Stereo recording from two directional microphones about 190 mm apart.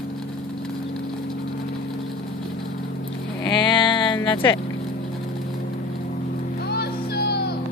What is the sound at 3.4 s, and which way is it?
Music, 25° left (ahead or behind).